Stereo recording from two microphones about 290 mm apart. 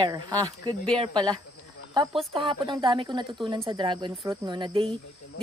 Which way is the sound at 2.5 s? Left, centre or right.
Centre.